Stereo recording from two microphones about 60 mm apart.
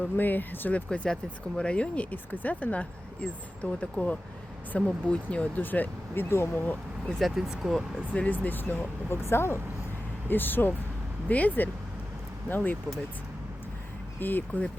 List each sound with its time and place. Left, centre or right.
0.0 s speech: left
0.9 s speech: centre
4.9 s speech: centre; by 6.7 s left
7.2 s speech: centre
8.1 s speech: left
9.0 s speech: left
10.2 s speech: left
14.2 s speech: left